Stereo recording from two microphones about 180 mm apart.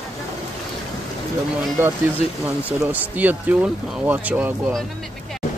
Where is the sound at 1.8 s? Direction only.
15° right (ahead or behind).